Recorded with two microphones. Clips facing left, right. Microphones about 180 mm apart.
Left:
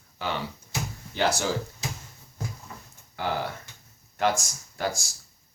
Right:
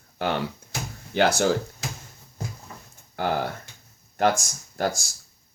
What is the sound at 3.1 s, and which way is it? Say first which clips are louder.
Speech: right 4 dB; 50° right (ahead or behind).